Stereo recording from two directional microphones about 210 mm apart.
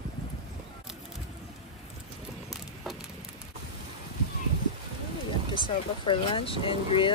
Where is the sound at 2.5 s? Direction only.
Centre (ahead or behind).